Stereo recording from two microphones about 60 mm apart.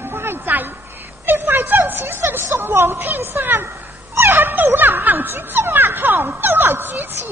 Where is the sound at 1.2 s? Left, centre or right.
Right.